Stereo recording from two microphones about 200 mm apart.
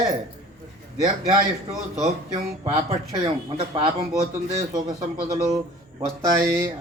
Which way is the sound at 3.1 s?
25° right (ahead or behind).